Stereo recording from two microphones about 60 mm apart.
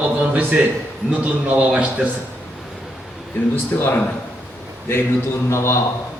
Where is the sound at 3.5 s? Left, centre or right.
Left.